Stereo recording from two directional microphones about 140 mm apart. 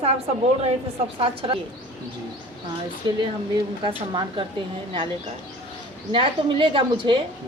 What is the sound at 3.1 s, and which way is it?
A woman's voice, 35° right (ahead or behind).